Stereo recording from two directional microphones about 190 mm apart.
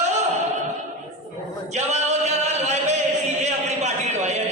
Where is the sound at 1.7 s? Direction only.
35° right (ahead or behind).